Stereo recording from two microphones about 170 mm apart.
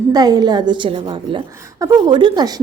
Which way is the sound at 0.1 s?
25° right (ahead or behind).